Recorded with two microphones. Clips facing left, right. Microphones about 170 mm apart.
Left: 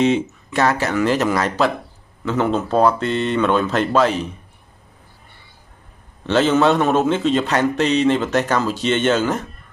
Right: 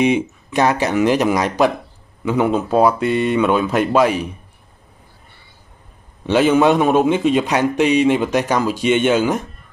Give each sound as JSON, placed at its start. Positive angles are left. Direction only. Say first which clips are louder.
{"t": 0.0, "sound": "a man's voice", "louder": "right 1 dB", "side_deg": -15}
{"t": 6.2, "sound": "a man's voice", "louder": "right 2 dB", "side_deg": -10}